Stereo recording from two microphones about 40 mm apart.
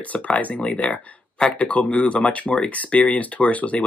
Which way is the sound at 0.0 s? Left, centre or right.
Left.